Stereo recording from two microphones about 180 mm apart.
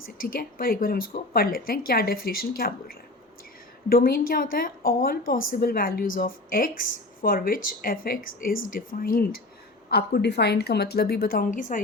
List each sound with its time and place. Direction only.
0.0 s a woman's voice: 50° left (ahead or behind)
9.9 s speech: 65° left (ahead or behind); by 11.8 s 50° left (ahead or behind)